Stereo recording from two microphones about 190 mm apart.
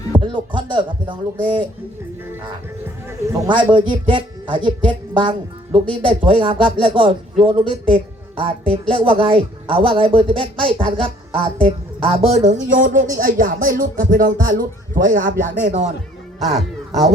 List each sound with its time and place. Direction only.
0.1 s speech: 25° right (ahead or behind)
3.5 s speech: 25° right (ahead or behind); by 15.9 s 40° right (ahead or behind)